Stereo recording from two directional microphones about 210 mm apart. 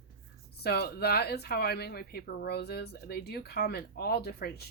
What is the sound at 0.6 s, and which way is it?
Speech, 50° left (ahead or behind).